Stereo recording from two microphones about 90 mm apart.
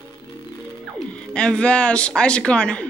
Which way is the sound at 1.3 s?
10° left (ahead or behind).